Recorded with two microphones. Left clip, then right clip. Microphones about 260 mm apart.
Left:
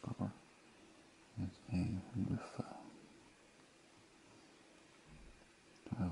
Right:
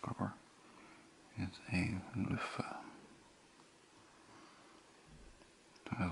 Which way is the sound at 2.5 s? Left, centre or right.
Centre.